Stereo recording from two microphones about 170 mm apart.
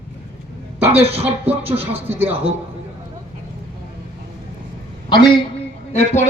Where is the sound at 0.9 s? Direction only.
35° right (ahead or behind).